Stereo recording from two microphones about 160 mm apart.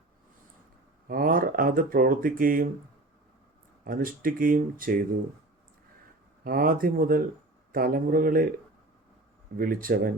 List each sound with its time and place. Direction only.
1.0 s speech: 60° right (ahead or behind)
3.8 s speech: 60° right (ahead or behind)
6.4 s speech: 65° right (ahead or behind)
9.6 s speech: 65° right (ahead or behind)